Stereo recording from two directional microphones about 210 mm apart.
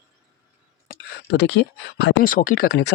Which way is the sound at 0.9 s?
55° left (ahead or behind).